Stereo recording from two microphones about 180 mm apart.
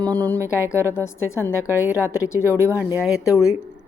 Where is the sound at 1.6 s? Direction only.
10° right (ahead or behind).